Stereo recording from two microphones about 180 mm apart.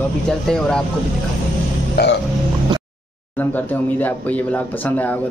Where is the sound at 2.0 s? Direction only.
65° left (ahead or behind).